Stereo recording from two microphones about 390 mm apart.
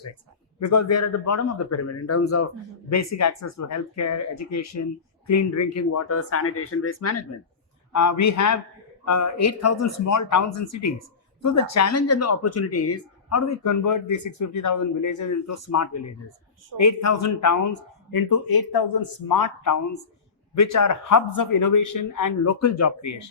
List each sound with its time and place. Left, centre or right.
0.6 s speech: left
7.9 s speech: left